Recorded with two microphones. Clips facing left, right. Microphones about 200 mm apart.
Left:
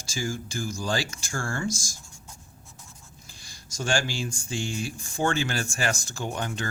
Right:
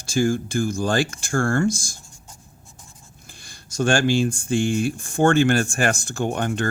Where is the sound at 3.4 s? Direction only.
55° right (ahead or behind).